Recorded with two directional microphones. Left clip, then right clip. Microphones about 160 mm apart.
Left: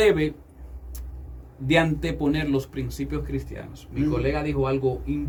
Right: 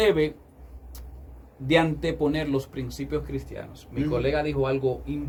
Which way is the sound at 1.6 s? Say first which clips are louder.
Even; 25° left (ahead or behind).